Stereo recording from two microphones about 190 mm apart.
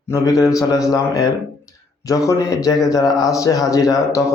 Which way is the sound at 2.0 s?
15° left (ahead or behind).